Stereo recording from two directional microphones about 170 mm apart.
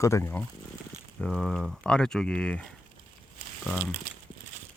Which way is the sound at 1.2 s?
Centre (ahead or behind).